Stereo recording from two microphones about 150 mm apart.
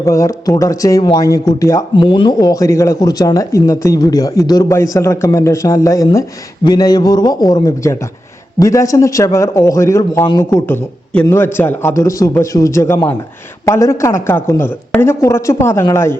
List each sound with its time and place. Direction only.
0.0 s speech: 20° left (ahead or behind)
2.0 s a woman's voice: 35° left (ahead or behind); by 16.1 s 15° left (ahead or behind)